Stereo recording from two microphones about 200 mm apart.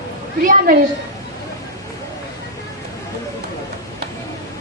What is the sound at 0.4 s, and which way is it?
Speech, 45° right (ahead or behind).